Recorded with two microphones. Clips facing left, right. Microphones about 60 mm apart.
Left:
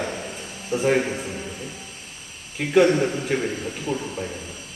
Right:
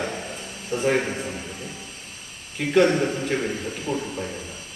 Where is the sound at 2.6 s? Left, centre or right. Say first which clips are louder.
Left 1 dB; centre.